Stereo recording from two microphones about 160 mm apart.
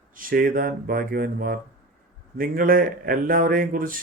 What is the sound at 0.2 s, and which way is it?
A man's voice, 60° right (ahead or behind).